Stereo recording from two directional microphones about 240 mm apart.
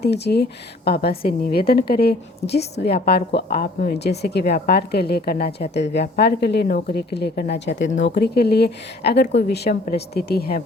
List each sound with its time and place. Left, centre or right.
0.0 s a woman's voice: left